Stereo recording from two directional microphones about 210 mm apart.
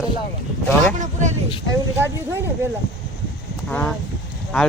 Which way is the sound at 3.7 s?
5° left (ahead or behind).